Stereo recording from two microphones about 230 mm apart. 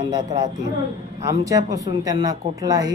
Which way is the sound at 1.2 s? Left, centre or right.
Centre.